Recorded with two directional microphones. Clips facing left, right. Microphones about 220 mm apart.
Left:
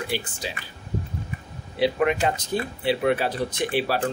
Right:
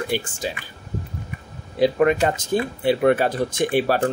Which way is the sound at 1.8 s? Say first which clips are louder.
Right 4 dB; 45° right (ahead or behind).